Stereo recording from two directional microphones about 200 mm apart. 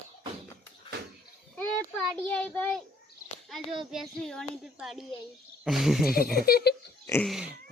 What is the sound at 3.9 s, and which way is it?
Speech, centre (ahead or behind).